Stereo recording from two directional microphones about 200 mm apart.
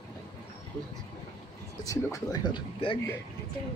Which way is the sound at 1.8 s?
15° left (ahead or behind).